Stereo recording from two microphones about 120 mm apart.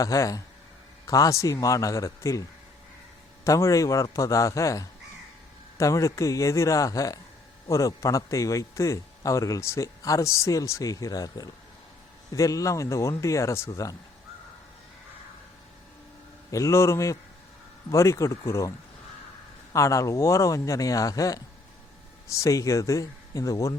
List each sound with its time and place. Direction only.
0.0 s a man's voice: 30° left (ahead or behind)
3.4 s a man's voice: 25° left (ahead or behind)
16.5 s a man's voice: 25° left (ahead or behind)
19.7 s a man's voice: 25° left (ahead or behind)